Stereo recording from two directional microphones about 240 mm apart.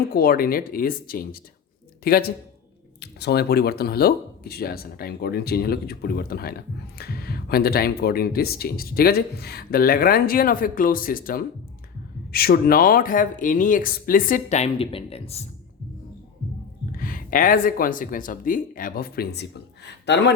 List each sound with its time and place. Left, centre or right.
0.1 s speech: left
17.0 s speech: left